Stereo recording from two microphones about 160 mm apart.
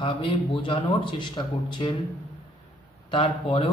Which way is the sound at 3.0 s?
35° left (ahead or behind).